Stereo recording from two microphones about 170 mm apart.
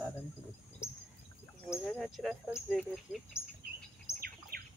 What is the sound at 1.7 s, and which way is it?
Speech, centre (ahead or behind).